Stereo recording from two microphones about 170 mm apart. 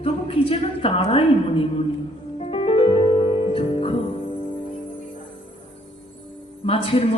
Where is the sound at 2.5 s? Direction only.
35° left (ahead or behind).